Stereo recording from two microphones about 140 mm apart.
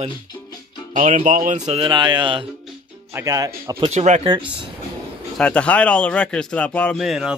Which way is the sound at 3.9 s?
50° right (ahead or behind).